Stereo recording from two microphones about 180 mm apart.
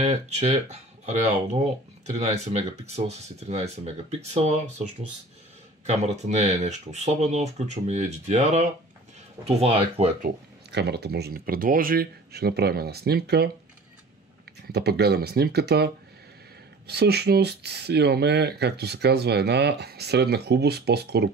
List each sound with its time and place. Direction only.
0.0 s speech: 35° right (ahead or behind)
5.9 s speech: 40° right (ahead or behind)
10.2 s speech: 65° right (ahead or behind)
14.7 s speech: 65° right (ahead or behind)